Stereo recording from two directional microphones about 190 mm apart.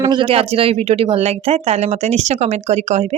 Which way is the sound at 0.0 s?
25° right (ahead or behind).